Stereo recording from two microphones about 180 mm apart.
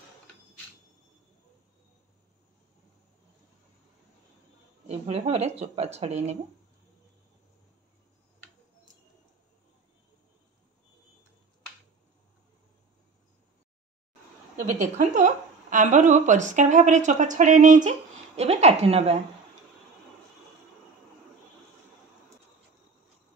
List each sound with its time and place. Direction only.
4.8 s speech: 40° right (ahead or behind)
14.7 s a woman's voice: 40° right (ahead or behind)